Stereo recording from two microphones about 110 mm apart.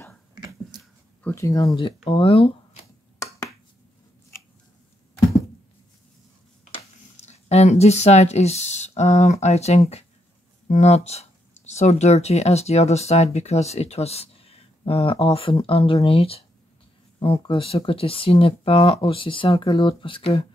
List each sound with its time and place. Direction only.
0.3 s a sound: 40° right (ahead or behind)
1.3 s speech: 30° left (ahead or behind)
2.0 s speech: 55° left (ahead or behind)
7.2 s speech: 85° left; by 20.4 s 60° left (ahead or behind)